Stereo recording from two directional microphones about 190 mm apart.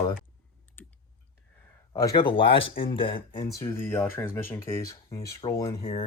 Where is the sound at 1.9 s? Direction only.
20° left (ahead or behind).